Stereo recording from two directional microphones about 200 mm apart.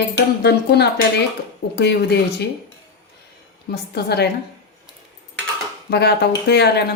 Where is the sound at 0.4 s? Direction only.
55° left (ahead or behind).